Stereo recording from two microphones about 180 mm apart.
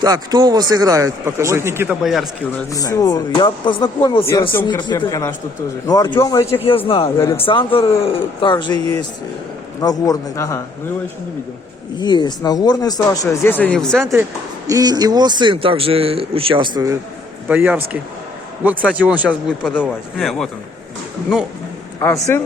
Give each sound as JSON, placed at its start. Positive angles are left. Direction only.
{"t": 0.0, "sound": "speech", "side_deg": -20}
{"t": 2.7, "sound": "speech", "side_deg": 20}
{"t": 6.6, "sound": "speech", "side_deg": 30}
{"t": 9.8, "sound": "a man's voice", "side_deg": 20}
{"t": 11.9, "sound": "speech", "side_deg": 25}
{"t": 14.7, "sound": "speech", "side_deg": -20}
{"t": 17.5, "sound": "speech", "side_deg": -10}
{"t": 22.0, "sound": "a man's voice", "side_deg": 15}